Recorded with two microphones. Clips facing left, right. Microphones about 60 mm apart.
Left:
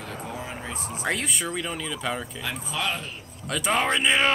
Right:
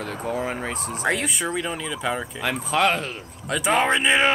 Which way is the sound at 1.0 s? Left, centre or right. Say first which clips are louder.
Right 4 dB; centre.